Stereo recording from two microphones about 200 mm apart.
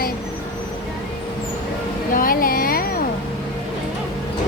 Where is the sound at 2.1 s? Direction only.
45° left (ahead or behind).